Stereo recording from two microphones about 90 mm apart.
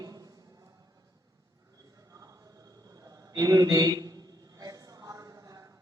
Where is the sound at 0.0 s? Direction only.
45° right (ahead or behind).